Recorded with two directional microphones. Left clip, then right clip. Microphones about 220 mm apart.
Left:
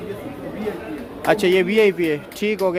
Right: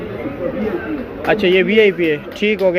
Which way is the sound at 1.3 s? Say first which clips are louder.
Right 3 dB; 25° left (ahead or behind).